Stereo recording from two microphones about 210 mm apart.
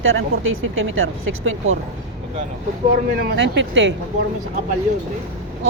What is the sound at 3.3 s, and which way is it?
Speech, 60° right (ahead or behind).